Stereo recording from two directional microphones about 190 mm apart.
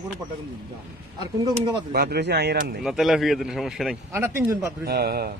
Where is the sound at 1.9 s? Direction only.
55° right (ahead or behind).